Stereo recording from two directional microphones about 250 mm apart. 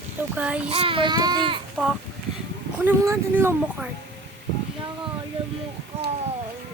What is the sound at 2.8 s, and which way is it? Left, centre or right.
Speech, centre.